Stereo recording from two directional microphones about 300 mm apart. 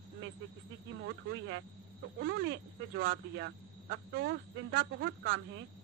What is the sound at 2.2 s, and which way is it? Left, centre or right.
Speech, right.